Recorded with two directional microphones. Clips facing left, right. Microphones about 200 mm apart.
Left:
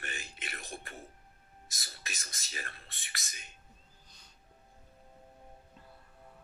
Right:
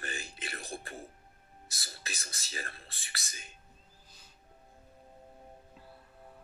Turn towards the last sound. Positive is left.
turn(degrees=-5)  # may be behind; listen again after turning